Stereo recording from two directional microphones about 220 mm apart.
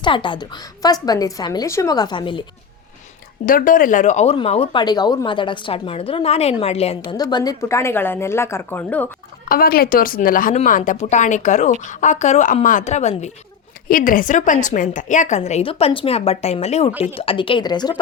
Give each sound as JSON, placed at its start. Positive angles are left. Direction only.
{"t": 0.0, "sound": "speech", "side_deg": 20}
{"t": 3.4, "sound": "speech", "side_deg": 40}
{"t": 9.5, "sound": "a woman's voice", "side_deg": 40}